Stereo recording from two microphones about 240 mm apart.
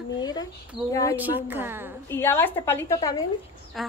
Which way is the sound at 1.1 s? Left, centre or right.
Centre.